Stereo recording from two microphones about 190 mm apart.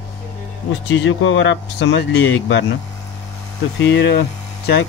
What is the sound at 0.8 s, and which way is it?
Speech, 80° left.